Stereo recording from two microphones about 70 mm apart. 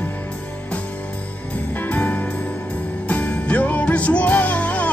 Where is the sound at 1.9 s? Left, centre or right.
Left.